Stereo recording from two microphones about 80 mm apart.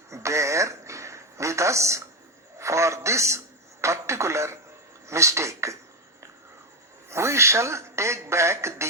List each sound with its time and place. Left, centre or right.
0.1 s a sound: right
5.0 s speech: right
7.1 s speech: right